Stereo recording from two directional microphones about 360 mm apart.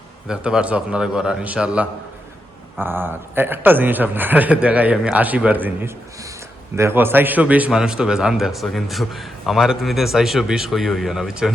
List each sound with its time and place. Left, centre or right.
0.3 s a man's voice: centre